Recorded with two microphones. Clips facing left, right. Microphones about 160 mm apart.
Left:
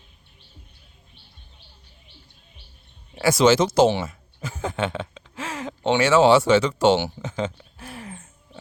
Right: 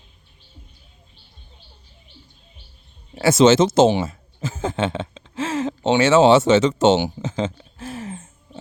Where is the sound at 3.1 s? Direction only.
25° right (ahead or behind).